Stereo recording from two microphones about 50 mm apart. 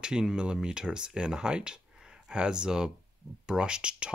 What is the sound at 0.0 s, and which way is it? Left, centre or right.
Speech, centre.